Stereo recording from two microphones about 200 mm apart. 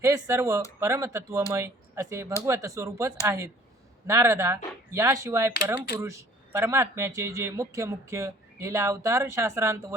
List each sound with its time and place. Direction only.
0.0 s speech: 15° right (ahead or behind)